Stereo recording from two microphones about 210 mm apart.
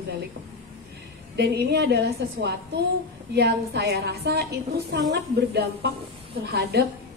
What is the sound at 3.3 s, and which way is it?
A woman's voice, 50° right (ahead or behind).